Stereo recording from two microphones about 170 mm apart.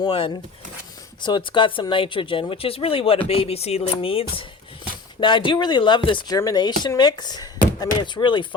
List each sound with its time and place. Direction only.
0.0 s speech: 30° left (ahead or behind)